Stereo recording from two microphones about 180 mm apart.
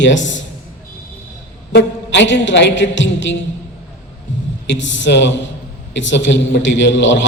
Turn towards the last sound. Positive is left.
turn(degrees=90)